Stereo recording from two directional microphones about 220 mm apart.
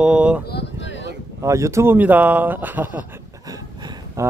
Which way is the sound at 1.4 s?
15° right (ahead or behind).